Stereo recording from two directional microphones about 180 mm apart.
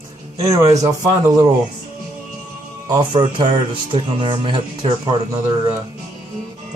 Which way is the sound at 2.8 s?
25° right (ahead or behind).